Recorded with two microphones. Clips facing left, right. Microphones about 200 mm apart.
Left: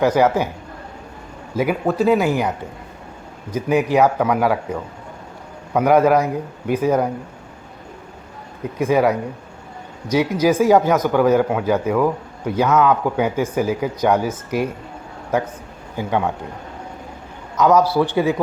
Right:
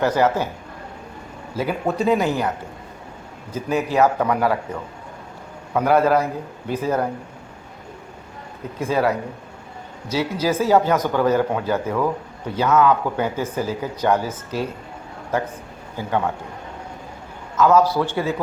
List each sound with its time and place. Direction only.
0.0 s a man's voice: 10° left (ahead or behind)
1.9 s speech: 5° left (ahead or behind)
3.5 s a man's voice: 15° left (ahead or behind)
8.8 s a man's voice: 15° left (ahead or behind)
16.0 s a man's voice: 15° left (ahead or behind)
17.6 s a man's voice: 15° left (ahead or behind)